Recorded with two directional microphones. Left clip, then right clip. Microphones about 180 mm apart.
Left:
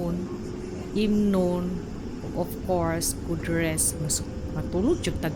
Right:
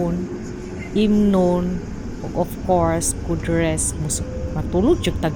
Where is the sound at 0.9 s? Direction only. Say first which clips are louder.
Right 7 dB; 15° right (ahead or behind).